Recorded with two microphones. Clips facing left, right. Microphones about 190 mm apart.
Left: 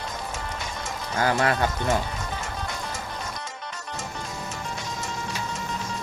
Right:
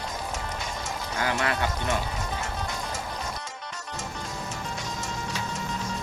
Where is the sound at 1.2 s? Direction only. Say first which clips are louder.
Left 5 dB; 40° left (ahead or behind).